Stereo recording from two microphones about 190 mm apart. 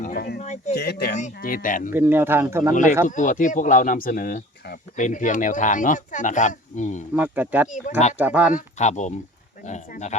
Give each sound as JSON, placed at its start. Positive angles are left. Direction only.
{"t": 0.0, "sound": "a sound", "side_deg": 55}
{"t": 0.7, "sound": "speech", "side_deg": 60}
{"t": 1.1, "sound": "speech", "side_deg": 45}
{"t": 1.9, "sound": "speech", "side_deg": -10}
{"t": 3.1, "sound": "speech", "side_deg": 40}
{"t": 7.1, "sound": "speech", "side_deg": -10}
{"t": 7.7, "sound": "speech", "side_deg": 40}
{"t": 8.2, "sound": "speech", "side_deg": -10}
{"t": 8.5, "sound": "speech", "side_deg": 40}